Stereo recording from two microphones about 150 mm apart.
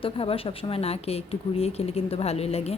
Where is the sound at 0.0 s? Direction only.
40° left (ahead or behind).